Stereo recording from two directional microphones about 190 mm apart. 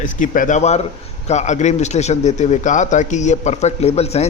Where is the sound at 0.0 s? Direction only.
45° left (ahead or behind).